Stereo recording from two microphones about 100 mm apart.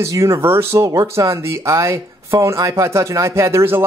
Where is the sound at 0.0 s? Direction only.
30° right (ahead or behind).